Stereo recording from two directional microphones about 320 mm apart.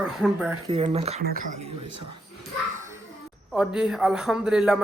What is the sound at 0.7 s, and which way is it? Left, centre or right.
Speech, centre.